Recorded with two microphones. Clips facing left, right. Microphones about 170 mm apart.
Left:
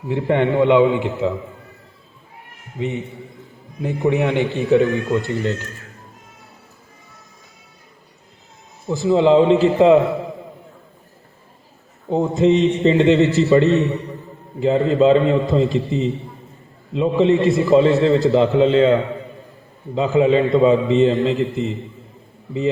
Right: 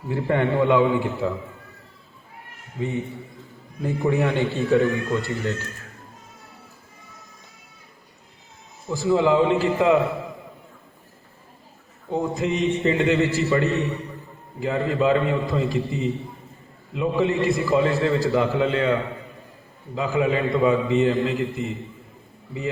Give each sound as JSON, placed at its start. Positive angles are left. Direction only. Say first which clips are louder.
{"t": 0.1, "sound": "a man's voice", "louder": "left 4 dB", "side_deg": 20}
{"t": 2.7, "sound": "a man's voice", "louder": "left 2 dB", "side_deg": 20}
{"t": 8.9, "sound": "a man's voice", "louder": "left 5 dB", "side_deg": 20}
{"t": 12.0, "sound": "a man's voice", "louder": "left 8 dB", "side_deg": 25}
{"t": 20.0, "sound": "a man's voice", "louder": "left 7 dB", "side_deg": 25}